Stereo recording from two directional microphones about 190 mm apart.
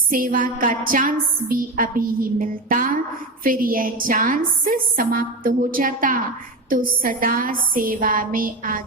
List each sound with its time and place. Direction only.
0.1 s a woman's voice: 45° right (ahead or behind)